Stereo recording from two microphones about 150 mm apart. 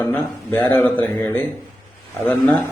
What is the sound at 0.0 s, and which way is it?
A man's voice, 15° left (ahead or behind).